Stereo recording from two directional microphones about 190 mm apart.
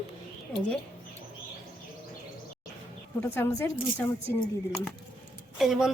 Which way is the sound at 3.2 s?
15° left (ahead or behind).